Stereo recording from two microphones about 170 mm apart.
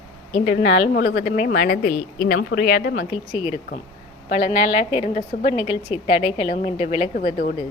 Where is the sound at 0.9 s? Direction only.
65° left (ahead or behind).